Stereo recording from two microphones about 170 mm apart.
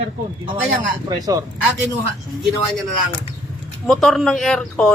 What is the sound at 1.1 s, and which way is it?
Speech, 20° right (ahead or behind).